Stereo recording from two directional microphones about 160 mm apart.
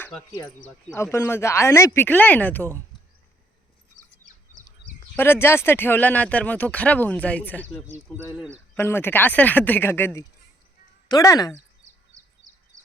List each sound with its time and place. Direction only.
0.9 s speech: 15° left (ahead or behind)
5.1 s speech: 15° left (ahead or behind)